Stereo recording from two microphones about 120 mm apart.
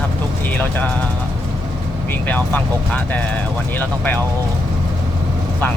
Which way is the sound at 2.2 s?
15° left (ahead or behind).